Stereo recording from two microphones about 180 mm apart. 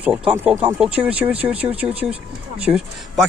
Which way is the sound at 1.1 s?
30° right (ahead or behind).